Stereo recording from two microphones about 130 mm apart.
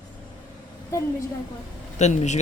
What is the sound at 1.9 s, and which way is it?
Speech, 60° left (ahead or behind).